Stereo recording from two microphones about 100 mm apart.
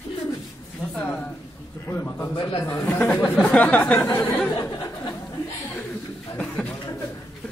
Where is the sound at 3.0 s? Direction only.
15° left (ahead or behind).